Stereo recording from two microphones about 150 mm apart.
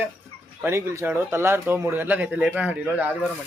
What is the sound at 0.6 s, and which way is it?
Speech, 20° right (ahead or behind).